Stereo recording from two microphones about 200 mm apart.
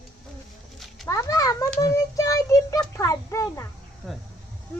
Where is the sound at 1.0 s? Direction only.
15° left (ahead or behind).